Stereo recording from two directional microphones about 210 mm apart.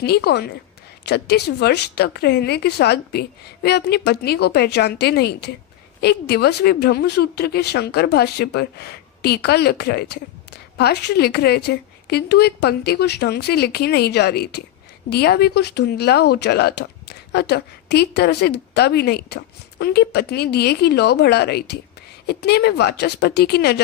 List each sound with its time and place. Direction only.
0.0 s speech: 50° left (ahead or behind)